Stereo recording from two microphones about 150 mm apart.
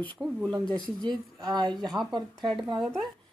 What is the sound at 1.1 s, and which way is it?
Speech, 30° right (ahead or behind).